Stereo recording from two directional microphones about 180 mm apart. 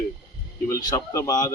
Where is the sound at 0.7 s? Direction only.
20° left (ahead or behind).